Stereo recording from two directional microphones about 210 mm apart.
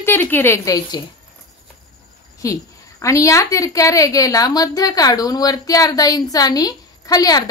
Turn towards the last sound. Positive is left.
turn(degrees=15)  # may be behind; listen again after turning